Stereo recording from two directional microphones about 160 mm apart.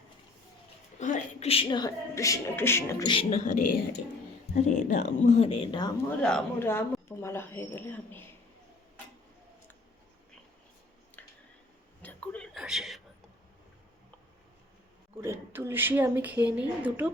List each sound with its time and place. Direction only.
0.9 s speech: 50° left (ahead or behind); by 3.1 s 15° left (ahead or behind)
3.1 s speech: 35° left (ahead or behind); by 5.3 s 50° left (ahead or behind)
5.4 s speech: 35° left (ahead or behind)
6.1 s a woman's voice: 10° left (ahead or behind)
12.0 s whispering: 10° left (ahead or behind)
12.5 s a sound: centre (ahead or behind)
15.2 s speech: 15° right (ahead or behind)